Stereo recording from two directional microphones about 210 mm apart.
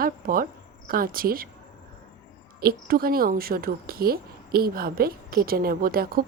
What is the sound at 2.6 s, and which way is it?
A woman's voice, 45° right (ahead or behind).